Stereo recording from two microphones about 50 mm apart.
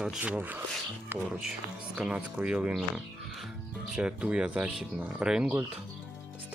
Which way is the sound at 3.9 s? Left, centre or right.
Centre.